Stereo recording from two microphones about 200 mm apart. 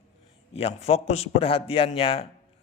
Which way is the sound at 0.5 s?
30° left (ahead or behind).